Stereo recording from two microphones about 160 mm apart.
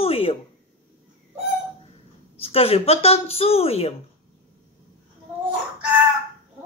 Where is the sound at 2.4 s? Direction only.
35° left (ahead or behind).